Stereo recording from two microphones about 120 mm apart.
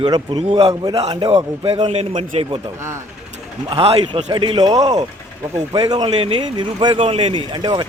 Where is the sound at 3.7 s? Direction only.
55° right (ahead or behind).